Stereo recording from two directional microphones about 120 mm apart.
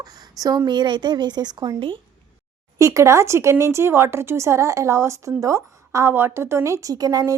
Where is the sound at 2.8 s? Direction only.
25° right (ahead or behind).